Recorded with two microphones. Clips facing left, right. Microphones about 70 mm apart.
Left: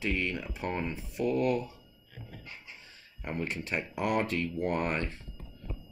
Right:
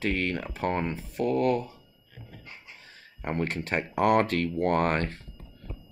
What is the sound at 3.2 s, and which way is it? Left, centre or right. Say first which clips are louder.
Speech: right 5 dB; right.